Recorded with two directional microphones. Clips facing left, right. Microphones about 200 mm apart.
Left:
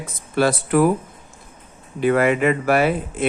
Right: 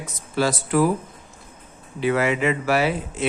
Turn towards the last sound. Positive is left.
turn(degrees=55)  # may be behind; listen again after turning